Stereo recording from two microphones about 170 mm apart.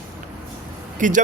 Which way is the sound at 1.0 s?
50° right (ahead or behind).